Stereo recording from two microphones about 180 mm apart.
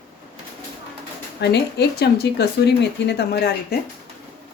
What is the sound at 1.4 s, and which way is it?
Speech, 65° left (ahead or behind).